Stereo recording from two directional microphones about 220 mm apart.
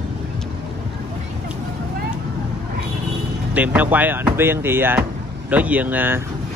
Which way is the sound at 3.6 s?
5° right (ahead or behind).